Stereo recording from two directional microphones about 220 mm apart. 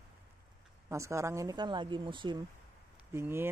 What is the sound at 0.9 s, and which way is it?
Speech, 15° right (ahead or behind).